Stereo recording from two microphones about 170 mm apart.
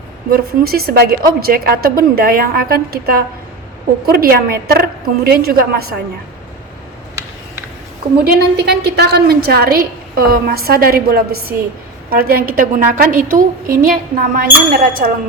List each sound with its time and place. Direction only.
0.3 s a woman's voice: 60° right (ahead or behind)
8.2 s a woman's voice: 75° right (ahead or behind); by 15.1 s 55° right (ahead or behind)